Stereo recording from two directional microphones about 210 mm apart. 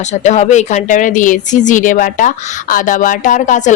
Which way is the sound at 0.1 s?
35° left (ahead or behind).